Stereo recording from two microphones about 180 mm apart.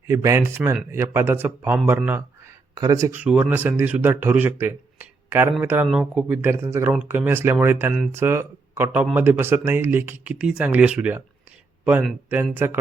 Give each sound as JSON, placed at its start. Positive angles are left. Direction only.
{"t": 0.1, "sound": "speech", "side_deg": -15}
{"t": 12.5, "sound": "speech", "side_deg": -10}